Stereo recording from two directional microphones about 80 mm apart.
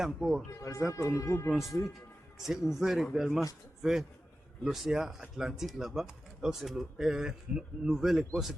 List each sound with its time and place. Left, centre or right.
0.0 s speech: centre
0.9 s speech: left
2.4 s speech: centre